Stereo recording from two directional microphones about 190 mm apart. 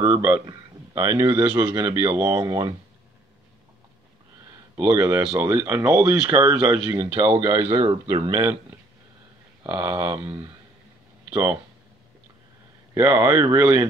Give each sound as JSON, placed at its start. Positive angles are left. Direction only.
{"t": 0.0, "sound": "speech", "side_deg": -20}
{"t": 4.7, "sound": "speech", "side_deg": -15}
{"t": 11.2, "sound": "speech", "side_deg": -10}
{"t": 12.9, "sound": "speech", "side_deg": -15}